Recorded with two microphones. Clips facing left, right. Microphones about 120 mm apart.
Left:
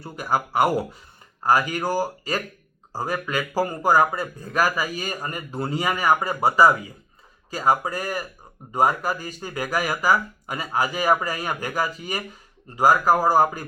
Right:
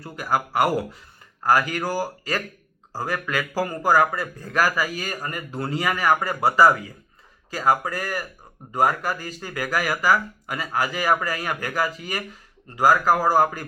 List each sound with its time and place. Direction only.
0.0 s speech: 25° left (ahead or behind)